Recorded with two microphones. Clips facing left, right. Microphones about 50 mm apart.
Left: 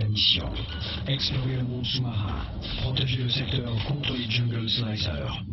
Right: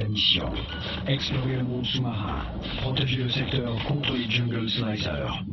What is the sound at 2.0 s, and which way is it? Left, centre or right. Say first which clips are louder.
Speech: right 3 dB; centre.